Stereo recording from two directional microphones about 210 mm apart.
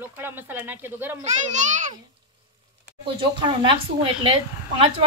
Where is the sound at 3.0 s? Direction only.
25° right (ahead or behind).